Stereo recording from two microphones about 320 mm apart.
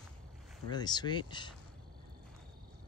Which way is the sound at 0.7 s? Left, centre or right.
Centre.